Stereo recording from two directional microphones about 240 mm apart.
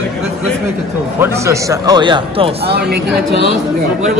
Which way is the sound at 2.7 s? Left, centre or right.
Right.